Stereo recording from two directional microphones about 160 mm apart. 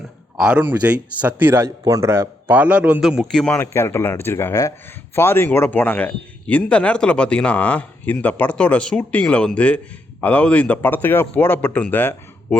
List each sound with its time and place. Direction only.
0.3 s a man's voice: 5° right (ahead or behind)
3.4 s speech: 10° left (ahead or behind)